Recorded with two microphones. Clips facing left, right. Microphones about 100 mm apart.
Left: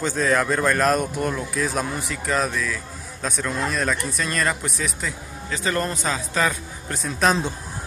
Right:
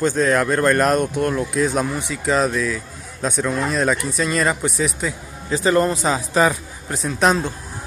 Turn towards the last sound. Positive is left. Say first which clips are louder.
# right 3 dB
turn(degrees=-5)  # may be behind; listen again after turning